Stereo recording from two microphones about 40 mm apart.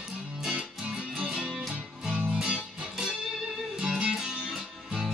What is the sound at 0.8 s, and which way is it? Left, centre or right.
Music, centre.